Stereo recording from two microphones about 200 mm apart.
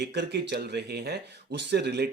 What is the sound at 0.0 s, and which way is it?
Speech, 55° right (ahead or behind).